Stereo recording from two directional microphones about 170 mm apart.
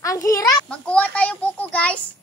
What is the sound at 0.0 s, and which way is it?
Speech, 20° left (ahead or behind).